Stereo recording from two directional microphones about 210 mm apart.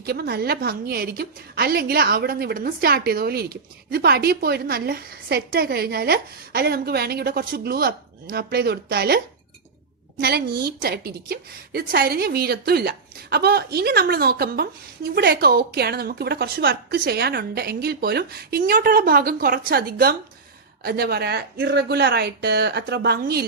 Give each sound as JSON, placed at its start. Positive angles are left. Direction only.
{"t": 0.0, "sound": "a woman's voice", "side_deg": -50}